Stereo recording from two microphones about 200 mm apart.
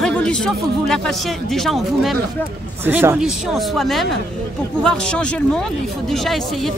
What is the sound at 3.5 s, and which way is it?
Speech, centre (ahead or behind).